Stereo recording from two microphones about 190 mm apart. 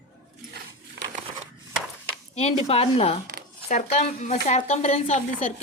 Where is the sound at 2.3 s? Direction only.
30° left (ahead or behind).